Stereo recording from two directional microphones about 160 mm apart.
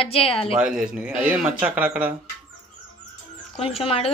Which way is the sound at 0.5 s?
5° right (ahead or behind).